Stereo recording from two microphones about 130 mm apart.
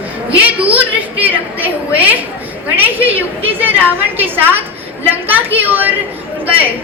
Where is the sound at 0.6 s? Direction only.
10° right (ahead or behind).